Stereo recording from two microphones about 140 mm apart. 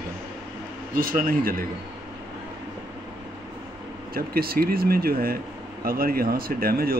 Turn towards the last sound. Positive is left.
turn(degrees=-90)